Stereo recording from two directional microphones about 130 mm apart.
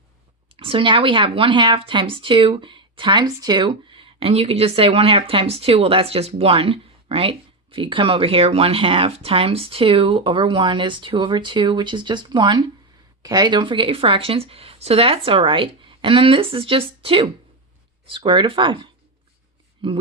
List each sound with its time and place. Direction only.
0.6 s speech: 45° right (ahead or behind)